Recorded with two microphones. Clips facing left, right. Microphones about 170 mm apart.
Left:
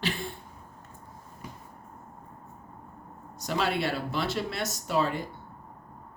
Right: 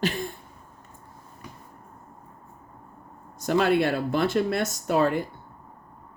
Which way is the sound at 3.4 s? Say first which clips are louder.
Right 7 dB; 50° right (ahead or behind).